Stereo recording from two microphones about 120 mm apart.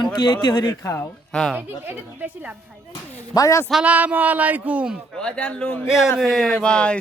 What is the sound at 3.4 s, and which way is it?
Speech, 25° left (ahead or behind).